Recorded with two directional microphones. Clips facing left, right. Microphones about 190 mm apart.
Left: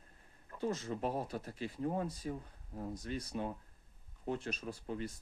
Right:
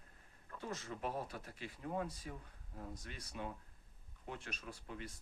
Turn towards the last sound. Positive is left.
turn(degrees=35)  # may be behind; listen again after turning